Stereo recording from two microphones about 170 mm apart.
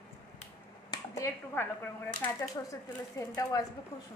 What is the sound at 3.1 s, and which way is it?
Speech, 20° left (ahead or behind).